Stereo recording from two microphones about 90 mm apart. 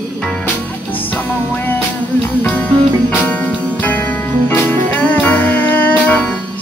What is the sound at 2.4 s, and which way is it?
Music, 15° left (ahead or behind).